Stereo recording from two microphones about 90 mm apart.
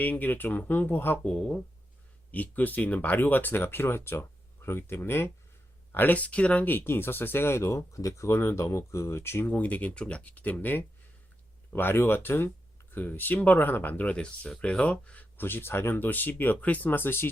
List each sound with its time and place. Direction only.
0.0 s speech: 20° left (ahead or behind)
1.3 s speech: 10° left (ahead or behind); by 9.5 s 30° left (ahead or behind)
9.5 s speech: 15° left (ahead or behind)